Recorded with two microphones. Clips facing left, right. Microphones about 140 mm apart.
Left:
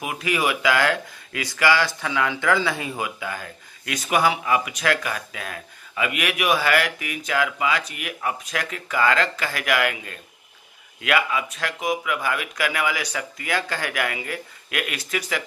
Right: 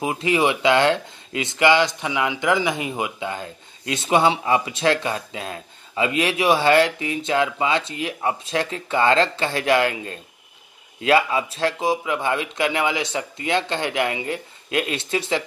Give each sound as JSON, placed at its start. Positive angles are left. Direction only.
{"t": 0.0, "sound": "speech", "side_deg": -25}